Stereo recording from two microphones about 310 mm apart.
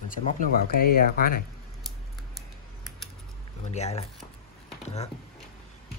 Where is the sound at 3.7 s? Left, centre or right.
Left.